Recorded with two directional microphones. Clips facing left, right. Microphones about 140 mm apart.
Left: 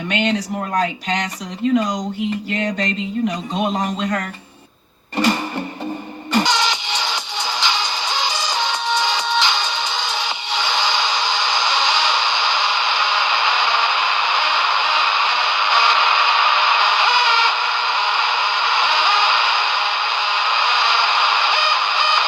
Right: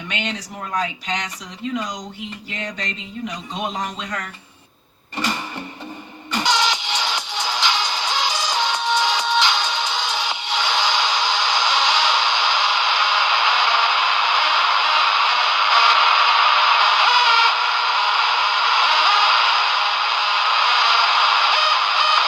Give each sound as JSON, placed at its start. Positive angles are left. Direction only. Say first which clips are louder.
{"t": 1.7, "sound": "a sound", "louder": "left 9 dB", "side_deg": 55}
{"t": 3.2, "sound": "a man's voice", "louder": "left 4 dB", "side_deg": 55}
{"t": 5.1, "sound": "music", "louder": "left 7 dB", "side_deg": 35}
{"t": 6.4, "sound": "music", "louder": "left 1 dB", "side_deg": -5}